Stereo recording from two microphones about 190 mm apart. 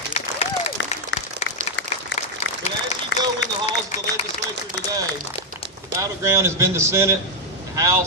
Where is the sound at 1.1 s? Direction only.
70° left (ahead or behind).